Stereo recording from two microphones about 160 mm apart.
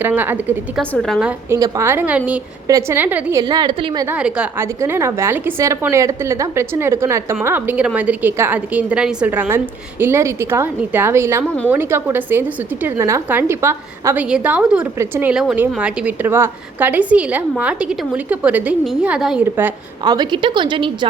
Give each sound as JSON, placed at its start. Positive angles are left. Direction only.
{"t": 0.0, "sound": "a woman's voice", "side_deg": -10}
{"t": 0.8, "sound": "a woman's voice", "side_deg": 5}
{"t": 1.5, "sound": "a woman's voice", "side_deg": -20}
{"t": 3.4, "sound": "a woman's voice", "side_deg": -25}
{"t": 4.0, "sound": "a woman's voice", "side_deg": -10}
{"t": 20.1, "sound": "a woman's voice", "side_deg": -30}